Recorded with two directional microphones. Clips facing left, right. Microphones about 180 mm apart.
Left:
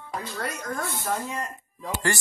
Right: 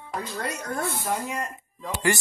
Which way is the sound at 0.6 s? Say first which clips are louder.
Right 1 dB; 35° right (ahead or behind).